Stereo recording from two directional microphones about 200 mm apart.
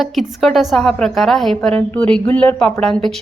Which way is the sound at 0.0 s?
Centre (ahead or behind).